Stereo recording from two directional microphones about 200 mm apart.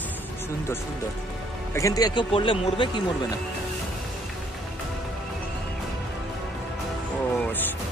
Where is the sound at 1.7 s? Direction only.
15° left (ahead or behind).